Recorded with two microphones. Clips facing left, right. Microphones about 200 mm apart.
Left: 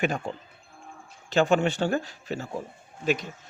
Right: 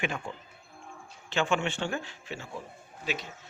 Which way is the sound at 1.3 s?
40° left (ahead or behind).